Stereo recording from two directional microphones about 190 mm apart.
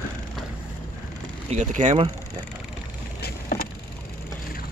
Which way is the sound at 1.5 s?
40° right (ahead or behind).